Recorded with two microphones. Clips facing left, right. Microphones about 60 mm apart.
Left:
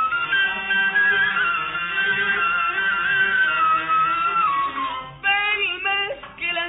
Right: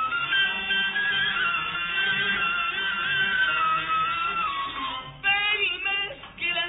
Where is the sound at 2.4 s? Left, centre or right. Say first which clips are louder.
Left 6 dB; left.